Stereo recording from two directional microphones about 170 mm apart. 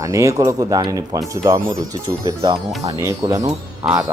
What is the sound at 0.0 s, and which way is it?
Speech, 20° right (ahead or behind).